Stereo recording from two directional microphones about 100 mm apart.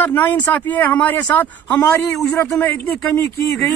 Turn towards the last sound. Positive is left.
turn(degrees=30)  # may be behind; listen again after turning